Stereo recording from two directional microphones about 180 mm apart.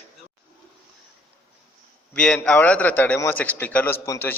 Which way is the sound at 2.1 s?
5° left (ahead or behind).